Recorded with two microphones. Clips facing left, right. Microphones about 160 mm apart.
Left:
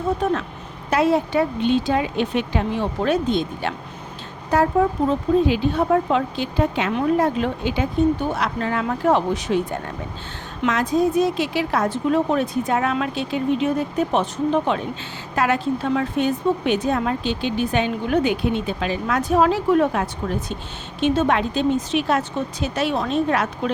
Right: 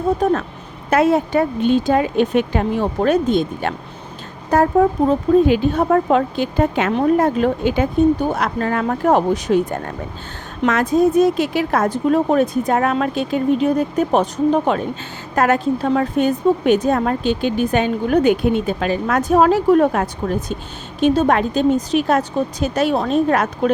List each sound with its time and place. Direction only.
0.9 s a woman's voice: 50° right (ahead or behind)